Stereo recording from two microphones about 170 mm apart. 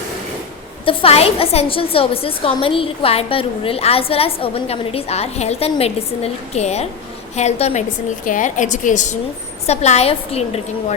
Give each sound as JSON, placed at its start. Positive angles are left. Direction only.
{"t": 0.9, "sound": "a woman's voice", "side_deg": 35}